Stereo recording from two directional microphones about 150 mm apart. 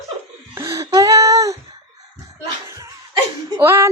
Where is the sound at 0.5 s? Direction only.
20° right (ahead or behind).